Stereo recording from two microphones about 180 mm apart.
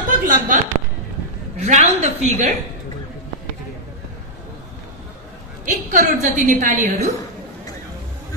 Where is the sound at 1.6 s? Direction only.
40° right (ahead or behind).